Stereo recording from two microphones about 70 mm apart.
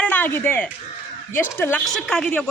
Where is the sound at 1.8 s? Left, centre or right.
Centre.